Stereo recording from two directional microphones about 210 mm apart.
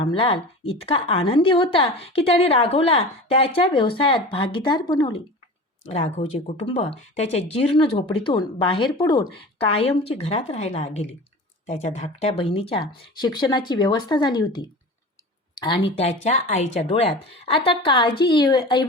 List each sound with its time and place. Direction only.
0.0 s a woman's voice: 25° left (ahead or behind)
6.7 s a woman's voice: 30° left (ahead or behind)